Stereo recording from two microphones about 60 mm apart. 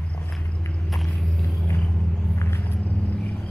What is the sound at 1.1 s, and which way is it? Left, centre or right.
Vehicle, centre.